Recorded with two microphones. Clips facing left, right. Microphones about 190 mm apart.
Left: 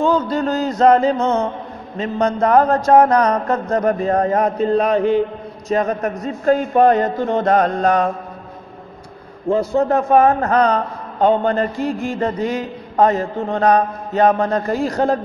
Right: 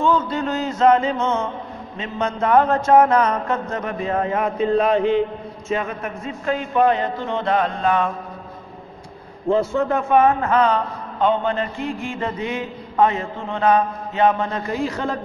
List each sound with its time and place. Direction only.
0.0 s a man's voice: 40° left (ahead or behind)
9.5 s a man's voice: 35° left (ahead or behind)